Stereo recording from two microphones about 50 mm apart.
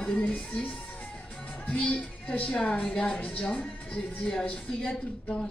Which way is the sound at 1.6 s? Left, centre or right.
Centre.